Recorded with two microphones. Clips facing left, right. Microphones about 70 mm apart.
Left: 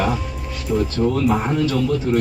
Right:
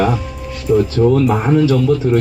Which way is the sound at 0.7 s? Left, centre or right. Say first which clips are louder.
Right 7 dB; right.